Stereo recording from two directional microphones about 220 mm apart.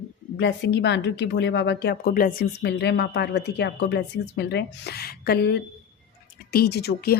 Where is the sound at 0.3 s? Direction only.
50° left (ahead or behind).